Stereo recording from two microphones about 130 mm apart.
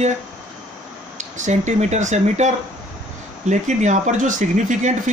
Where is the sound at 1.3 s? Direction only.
70° right (ahead or behind).